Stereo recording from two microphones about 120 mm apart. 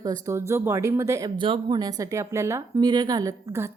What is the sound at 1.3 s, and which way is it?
A woman's voice, 45° right (ahead or behind).